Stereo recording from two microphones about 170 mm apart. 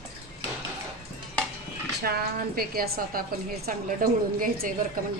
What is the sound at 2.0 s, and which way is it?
A woman's voice, 65° right (ahead or behind).